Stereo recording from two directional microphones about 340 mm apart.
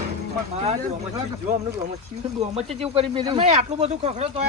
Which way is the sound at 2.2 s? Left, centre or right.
Centre.